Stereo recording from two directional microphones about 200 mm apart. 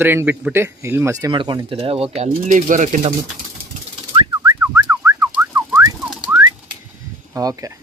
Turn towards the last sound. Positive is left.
turn(degrees=-15)  # may be behind; listen again after turning